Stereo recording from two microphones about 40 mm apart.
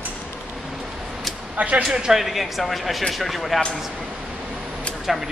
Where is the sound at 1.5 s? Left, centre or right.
Right.